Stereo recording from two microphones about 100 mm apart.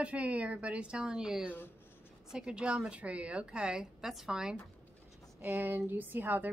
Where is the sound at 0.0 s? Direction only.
15° right (ahead or behind).